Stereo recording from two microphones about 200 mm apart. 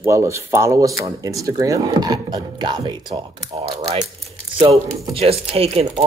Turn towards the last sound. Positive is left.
turn(degrees=-30)  # may be behind; listen again after turning